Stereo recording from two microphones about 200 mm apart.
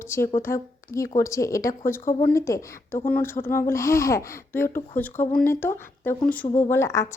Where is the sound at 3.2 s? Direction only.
10° left (ahead or behind).